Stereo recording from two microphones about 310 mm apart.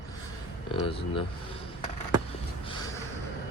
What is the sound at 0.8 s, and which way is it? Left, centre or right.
Speech, centre.